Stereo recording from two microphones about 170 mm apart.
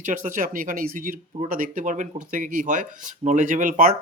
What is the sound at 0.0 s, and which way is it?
Speech, 50° right (ahead or behind).